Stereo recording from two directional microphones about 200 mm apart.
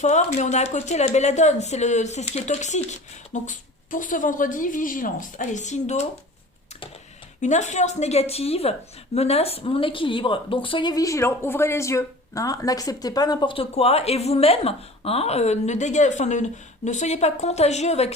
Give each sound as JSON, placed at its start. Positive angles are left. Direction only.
{"t": 0.0, "sound": "speech", "side_deg": 35}
{"t": 7.4, "sound": "speech", "side_deg": 35}